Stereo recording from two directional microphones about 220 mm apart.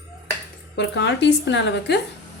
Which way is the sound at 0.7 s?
50° left (ahead or behind).